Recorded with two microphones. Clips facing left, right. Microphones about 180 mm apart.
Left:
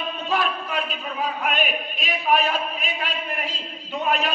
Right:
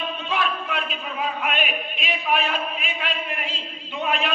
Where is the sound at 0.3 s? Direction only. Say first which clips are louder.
Left 2 dB; 40° left (ahead or behind).